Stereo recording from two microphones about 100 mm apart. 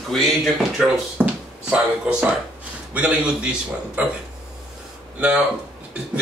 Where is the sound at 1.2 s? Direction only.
10° right (ahead or behind).